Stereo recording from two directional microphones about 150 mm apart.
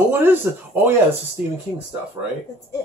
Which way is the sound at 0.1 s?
15° right (ahead or behind).